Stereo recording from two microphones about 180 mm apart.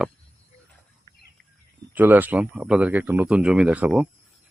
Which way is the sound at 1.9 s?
10° right (ahead or behind).